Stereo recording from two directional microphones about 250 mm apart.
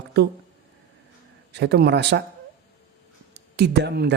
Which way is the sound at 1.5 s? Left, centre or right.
Right.